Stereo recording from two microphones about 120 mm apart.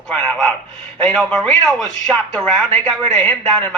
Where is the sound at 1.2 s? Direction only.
5° left (ahead or behind).